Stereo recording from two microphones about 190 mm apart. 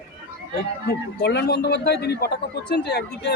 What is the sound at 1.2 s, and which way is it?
Speech, 60° left (ahead or behind).